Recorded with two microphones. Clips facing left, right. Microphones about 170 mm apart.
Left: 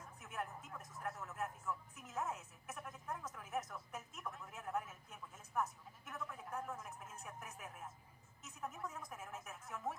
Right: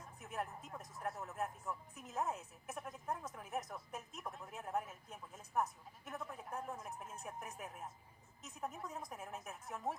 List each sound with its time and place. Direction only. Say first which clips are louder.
0.2 s speech: right 2 dB; 35° right (ahead or behind)
6.1 s speech: right 1 dB; 35° right (ahead or behind)